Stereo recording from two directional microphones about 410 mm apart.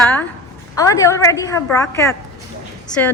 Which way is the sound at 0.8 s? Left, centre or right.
Centre.